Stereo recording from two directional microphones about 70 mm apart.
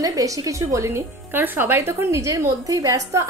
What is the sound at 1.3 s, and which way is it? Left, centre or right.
A woman's voice, right.